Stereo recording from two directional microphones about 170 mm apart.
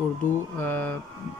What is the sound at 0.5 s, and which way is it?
Speech, 10° left (ahead or behind).